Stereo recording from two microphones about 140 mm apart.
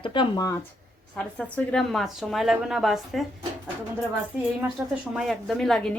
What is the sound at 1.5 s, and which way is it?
A woman's voice, 5° left (ahead or behind).